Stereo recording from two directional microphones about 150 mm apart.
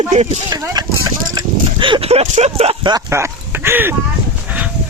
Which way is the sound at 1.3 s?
30° right (ahead or behind).